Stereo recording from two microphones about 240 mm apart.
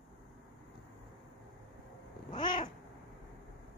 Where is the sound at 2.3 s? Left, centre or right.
Centre.